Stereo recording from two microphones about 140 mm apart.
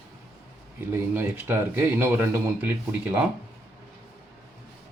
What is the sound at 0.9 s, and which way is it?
Speech, 15° right (ahead or behind).